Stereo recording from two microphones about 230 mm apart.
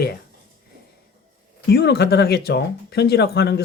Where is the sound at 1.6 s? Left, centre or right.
Left.